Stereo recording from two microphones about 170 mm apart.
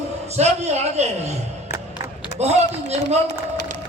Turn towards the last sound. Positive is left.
turn(degrees=-40)  # may be behind; listen again after turning